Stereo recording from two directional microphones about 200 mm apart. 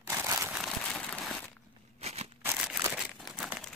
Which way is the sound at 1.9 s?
30° right (ahead or behind).